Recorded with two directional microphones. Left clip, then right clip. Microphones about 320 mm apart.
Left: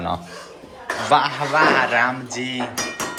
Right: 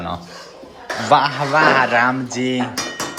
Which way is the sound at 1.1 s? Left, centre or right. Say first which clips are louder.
Right 3 dB; centre.